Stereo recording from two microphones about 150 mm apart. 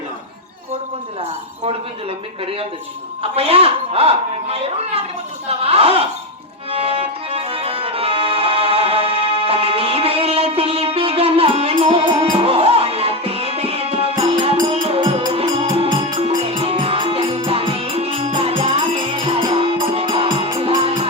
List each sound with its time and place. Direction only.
1.6 s speech: 40° right (ahead or behind)
6.7 s music: 40° right (ahead or behind)